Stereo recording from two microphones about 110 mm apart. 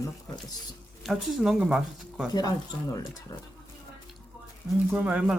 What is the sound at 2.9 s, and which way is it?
Speech, 35° left (ahead or behind).